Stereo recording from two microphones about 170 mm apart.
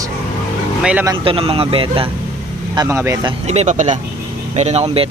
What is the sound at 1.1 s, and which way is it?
Speech, 30° right (ahead or behind).